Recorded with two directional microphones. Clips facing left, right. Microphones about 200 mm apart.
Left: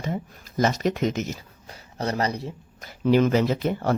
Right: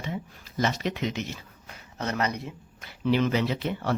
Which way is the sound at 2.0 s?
35° left (ahead or behind).